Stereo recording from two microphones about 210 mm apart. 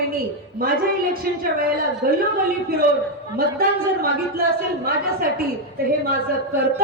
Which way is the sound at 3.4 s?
45° right (ahead or behind).